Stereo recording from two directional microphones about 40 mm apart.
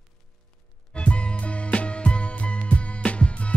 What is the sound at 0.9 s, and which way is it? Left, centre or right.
Music, left.